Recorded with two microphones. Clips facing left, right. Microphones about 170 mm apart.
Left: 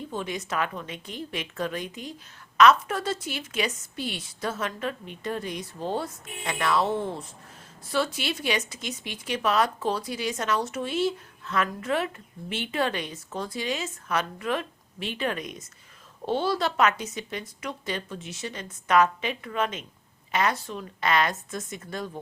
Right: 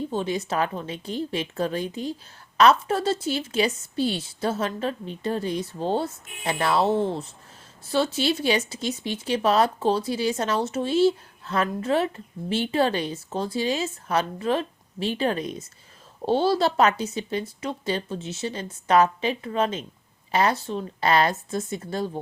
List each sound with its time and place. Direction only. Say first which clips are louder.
0.1 s a woman's voice: right 5 dB; 30° right (ahead or behind)